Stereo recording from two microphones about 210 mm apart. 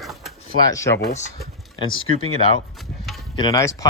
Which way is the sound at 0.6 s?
15° left (ahead or behind).